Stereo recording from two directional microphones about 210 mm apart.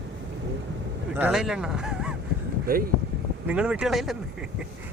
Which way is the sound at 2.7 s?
45° right (ahead or behind).